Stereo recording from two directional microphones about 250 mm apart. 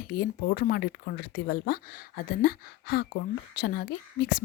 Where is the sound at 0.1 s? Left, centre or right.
Left.